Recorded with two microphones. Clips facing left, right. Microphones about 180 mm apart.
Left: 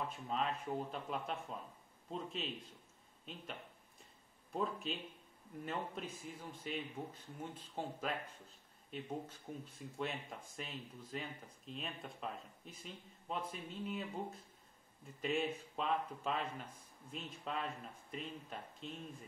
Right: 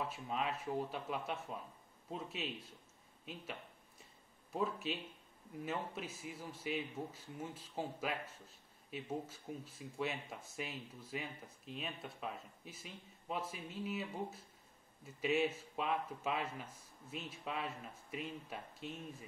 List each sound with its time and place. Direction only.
0.1 s a man's voice: 5° right (ahead or behind)
4.6 s a man's voice: 5° right (ahead or behind)